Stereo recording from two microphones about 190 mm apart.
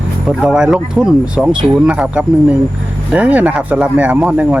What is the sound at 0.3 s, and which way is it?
Speech, 5° right (ahead or behind).